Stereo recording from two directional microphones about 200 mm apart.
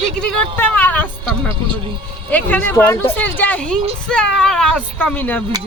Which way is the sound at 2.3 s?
10° left (ahead or behind).